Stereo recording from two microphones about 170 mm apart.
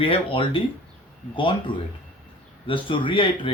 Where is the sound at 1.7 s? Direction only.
30° left (ahead or behind).